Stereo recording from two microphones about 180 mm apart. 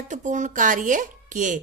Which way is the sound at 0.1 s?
45° right (ahead or behind).